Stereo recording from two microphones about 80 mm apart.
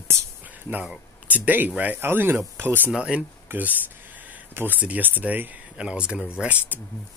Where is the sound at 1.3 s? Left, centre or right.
Right.